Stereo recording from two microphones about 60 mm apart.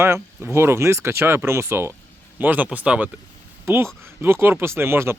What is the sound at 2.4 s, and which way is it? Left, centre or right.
Speech, right.